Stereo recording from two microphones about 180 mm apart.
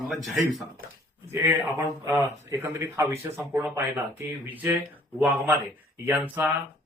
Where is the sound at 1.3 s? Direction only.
10° right (ahead or behind).